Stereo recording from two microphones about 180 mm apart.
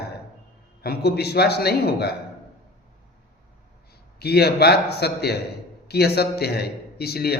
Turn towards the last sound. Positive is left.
turn(degrees=60)  # may be behind; listen again after turning